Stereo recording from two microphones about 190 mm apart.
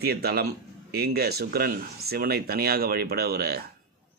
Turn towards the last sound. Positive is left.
turn(degrees=-55)  # may be behind; listen again after turning